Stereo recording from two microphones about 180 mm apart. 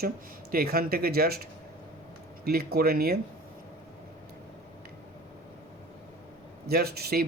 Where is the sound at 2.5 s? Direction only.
60° right (ahead or behind).